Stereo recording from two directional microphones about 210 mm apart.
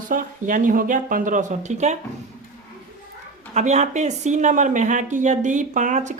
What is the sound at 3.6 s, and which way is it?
Speech, 35° right (ahead or behind).